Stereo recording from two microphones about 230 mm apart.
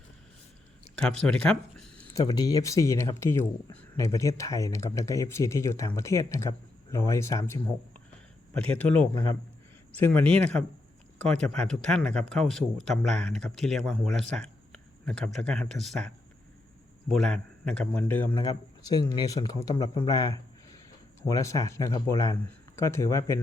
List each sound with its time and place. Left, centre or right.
0.9 s speech: centre
2.1 s speech: centre
8.8 s speech: centre